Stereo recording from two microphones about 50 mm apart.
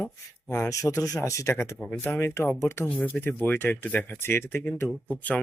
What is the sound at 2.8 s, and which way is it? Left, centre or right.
Speech, left.